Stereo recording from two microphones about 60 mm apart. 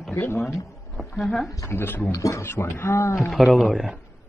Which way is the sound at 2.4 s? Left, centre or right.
Left.